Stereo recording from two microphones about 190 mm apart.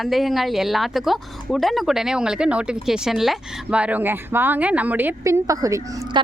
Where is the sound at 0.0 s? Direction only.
Centre (ahead or behind).